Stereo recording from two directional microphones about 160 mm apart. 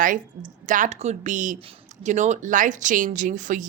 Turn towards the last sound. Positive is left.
turn(degrees=-55)  # may be behind; listen again after turning